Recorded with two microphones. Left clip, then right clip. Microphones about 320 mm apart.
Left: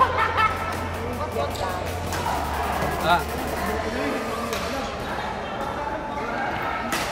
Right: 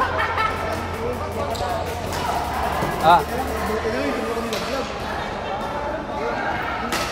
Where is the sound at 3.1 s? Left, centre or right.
Centre.